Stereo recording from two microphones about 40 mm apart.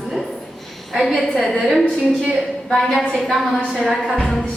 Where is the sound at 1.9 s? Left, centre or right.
Centre.